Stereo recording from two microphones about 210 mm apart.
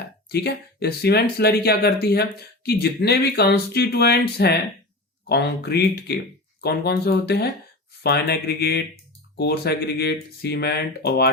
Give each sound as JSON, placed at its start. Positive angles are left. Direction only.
{"t": 0.3, "sound": "speech", "side_deg": 50}